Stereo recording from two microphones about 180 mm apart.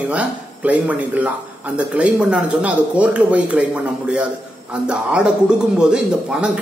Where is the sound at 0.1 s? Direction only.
5° right (ahead or behind).